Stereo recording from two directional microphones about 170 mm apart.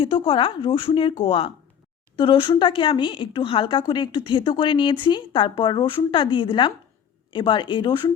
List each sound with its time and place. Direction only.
0.0 s a woman's voice: 30° left (ahead or behind)